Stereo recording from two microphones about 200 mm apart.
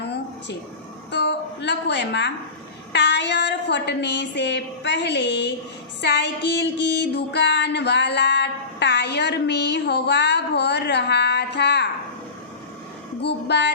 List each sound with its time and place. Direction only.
0.0 s a sound: 60° left (ahead or behind)
1.1 s speech: 60° left (ahead or behind)
2.9 s female singing: 60° left (ahead or behind)
13.2 s female singing: 60° left (ahead or behind)